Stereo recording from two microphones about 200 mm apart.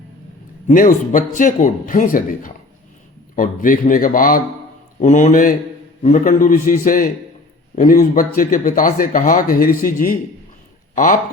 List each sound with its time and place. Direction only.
0.7 s a man's voice: 40° left (ahead or behind)